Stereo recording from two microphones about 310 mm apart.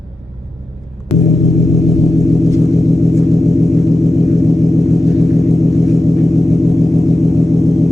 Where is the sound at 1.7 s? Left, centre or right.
Centre.